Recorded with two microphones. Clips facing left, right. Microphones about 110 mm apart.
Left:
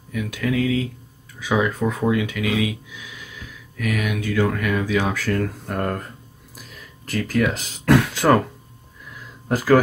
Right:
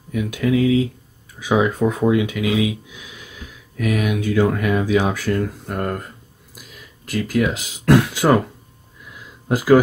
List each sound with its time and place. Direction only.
0.1 s speech: 25° right (ahead or behind)
5.7 s speech: 5° right (ahead or behind)
7.1 s speech: 10° right (ahead or behind)
9.5 s speech: 15° right (ahead or behind)